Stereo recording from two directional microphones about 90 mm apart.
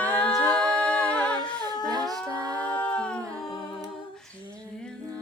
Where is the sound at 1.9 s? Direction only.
45° right (ahead or behind).